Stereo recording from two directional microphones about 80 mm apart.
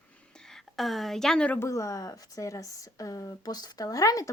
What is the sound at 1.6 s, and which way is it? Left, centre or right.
Speech, left.